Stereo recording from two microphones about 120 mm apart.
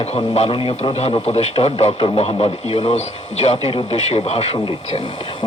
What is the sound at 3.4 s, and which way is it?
Speech, 65° left (ahead or behind).